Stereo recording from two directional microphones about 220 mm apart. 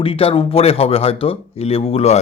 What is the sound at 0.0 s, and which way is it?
A man's voice, 25° left (ahead or behind).